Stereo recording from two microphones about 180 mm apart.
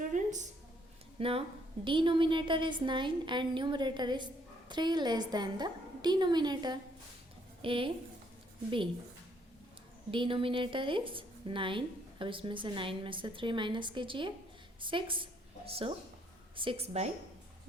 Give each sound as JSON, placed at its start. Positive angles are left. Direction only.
{"t": 0.1, "sound": "a sound", "side_deg": -40}
{"t": 1.2, "sound": "a woman's voice", "side_deg": -30}
{"t": 10.1, "sound": "a woman's voice", "side_deg": -30}